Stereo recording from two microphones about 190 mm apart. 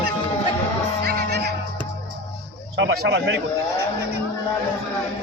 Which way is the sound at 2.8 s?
70° right (ahead or behind).